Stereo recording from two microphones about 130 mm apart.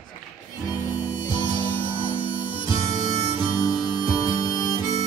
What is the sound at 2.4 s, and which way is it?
Harmonica, 40° left (ahead or behind).